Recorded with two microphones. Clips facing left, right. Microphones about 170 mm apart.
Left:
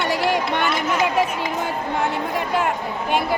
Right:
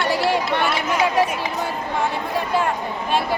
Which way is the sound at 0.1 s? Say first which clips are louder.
Right 2 dB; 15° left (ahead or behind).